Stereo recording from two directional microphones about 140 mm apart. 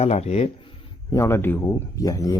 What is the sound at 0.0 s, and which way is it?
Speech, 50° left (ahead or behind).